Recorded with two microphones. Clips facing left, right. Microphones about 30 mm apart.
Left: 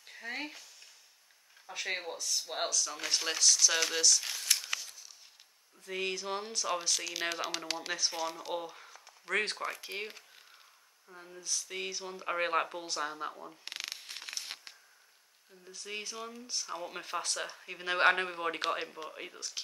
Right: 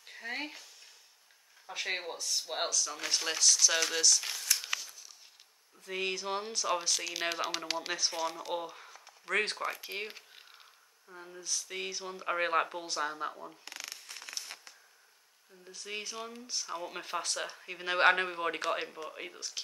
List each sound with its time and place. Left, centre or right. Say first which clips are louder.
0.0 s speech: right 1 dB; centre
1.7 s speech: right 1 dB; centre
4.6 s a sound: right 1 dB; centre
5.9 s speech: right 1 dB; centre
13.7 s a sound: left 7 dB; left
15.6 s speech: right 1 dB; centre